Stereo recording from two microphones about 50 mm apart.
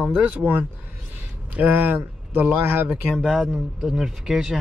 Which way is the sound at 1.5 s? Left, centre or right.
Right.